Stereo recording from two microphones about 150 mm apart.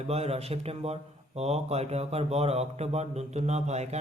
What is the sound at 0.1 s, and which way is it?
A man's voice, 45° right (ahead or behind).